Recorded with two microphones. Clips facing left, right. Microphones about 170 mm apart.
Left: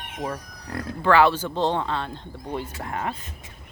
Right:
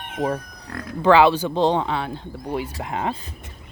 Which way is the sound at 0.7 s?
30° left (ahead or behind).